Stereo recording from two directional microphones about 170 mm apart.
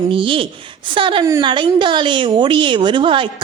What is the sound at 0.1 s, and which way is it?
A woman's voice, 30° right (ahead or behind).